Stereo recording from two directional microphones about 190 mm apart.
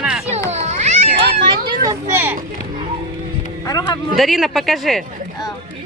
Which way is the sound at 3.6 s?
20° left (ahead or behind).